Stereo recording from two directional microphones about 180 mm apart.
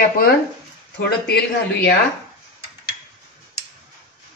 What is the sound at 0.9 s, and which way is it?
Speech, 65° left (ahead or behind).